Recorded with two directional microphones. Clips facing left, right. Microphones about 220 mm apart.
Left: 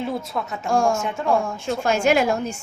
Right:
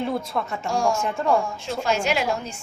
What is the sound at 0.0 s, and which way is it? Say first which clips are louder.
A woman's voice: right 1 dB; centre (ahead or behind).